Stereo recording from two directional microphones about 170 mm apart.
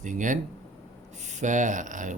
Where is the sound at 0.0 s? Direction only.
50° right (ahead or behind).